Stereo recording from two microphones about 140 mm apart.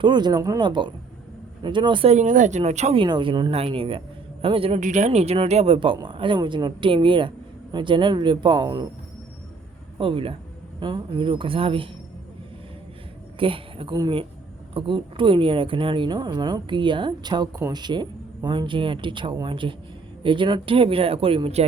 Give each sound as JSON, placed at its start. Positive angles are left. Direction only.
{"t": 0.0, "sound": "speech", "side_deg": -30}
{"t": 2.1, "sound": "speech", "side_deg": -65}
{"t": 3.0, "sound": "speech", "side_deg": -35}
{"t": 4.8, "sound": "speech", "side_deg": -60}
{"t": 10.0, "sound": "speech", "side_deg": -40}
{"t": 13.4, "sound": "speech", "side_deg": -40}